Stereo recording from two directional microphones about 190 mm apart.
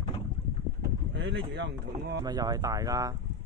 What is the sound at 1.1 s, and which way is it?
Speech, 75° right (ahead or behind).